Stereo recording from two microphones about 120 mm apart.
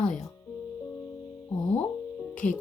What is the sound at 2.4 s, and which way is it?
Speech, 90° left.